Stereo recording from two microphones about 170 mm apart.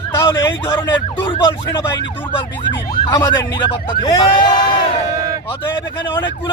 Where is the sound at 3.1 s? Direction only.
20° left (ahead or behind).